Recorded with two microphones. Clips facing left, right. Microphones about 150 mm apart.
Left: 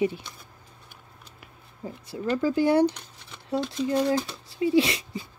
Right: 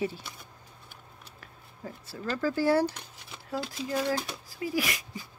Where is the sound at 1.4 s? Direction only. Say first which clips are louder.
Left 4 dB; 15° left (ahead or behind).